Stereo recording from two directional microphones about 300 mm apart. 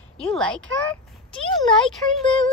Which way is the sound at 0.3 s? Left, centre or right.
Centre.